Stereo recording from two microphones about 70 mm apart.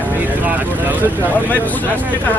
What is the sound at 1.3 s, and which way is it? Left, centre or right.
Speech, left.